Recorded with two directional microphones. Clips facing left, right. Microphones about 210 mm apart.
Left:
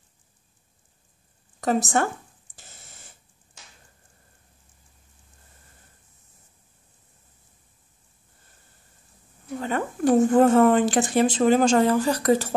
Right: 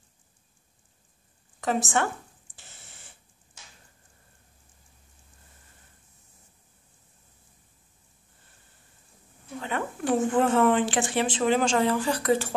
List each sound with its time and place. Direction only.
1.6 s a woman's voice: 40° left (ahead or behind)
9.6 s speech: 40° left (ahead or behind)